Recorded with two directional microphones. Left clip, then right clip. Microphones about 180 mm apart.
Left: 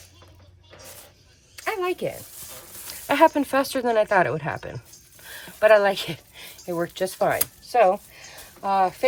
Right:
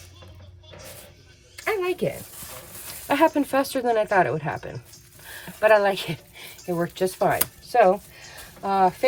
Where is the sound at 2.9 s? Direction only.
45° left (ahead or behind).